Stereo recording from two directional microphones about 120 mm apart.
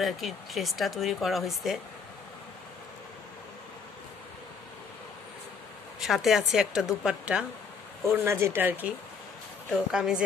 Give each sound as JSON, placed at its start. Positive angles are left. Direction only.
{"t": 0.0, "sound": "speech", "side_deg": 0}
{"t": 5.9, "sound": "speech", "side_deg": -5}
{"t": 8.1, "sound": "speech", "side_deg": -20}
{"t": 9.9, "sound": "speech", "side_deg": -5}